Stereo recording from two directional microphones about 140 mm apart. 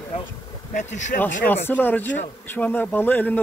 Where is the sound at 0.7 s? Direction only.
60° left (ahead or behind).